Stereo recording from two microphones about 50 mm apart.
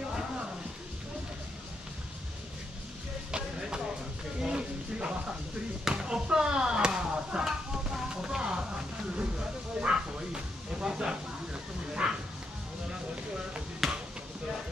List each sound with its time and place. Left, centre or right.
3.3 s music: centre
4.4 s a sound: centre
5.9 s chop: centre
9.8 s bow-wow: centre
11.9 s a sound: centre
13.8 s basketball bounce: centre